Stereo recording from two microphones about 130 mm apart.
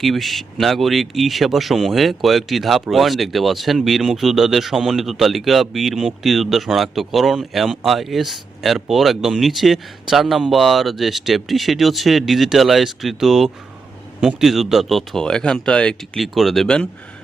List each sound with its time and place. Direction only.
0.0 s speech: centre (ahead or behind)